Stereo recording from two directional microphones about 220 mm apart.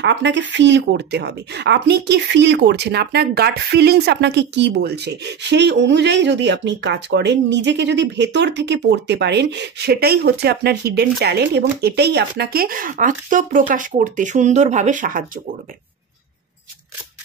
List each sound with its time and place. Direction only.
0.0 s speech: 55° right (ahead or behind)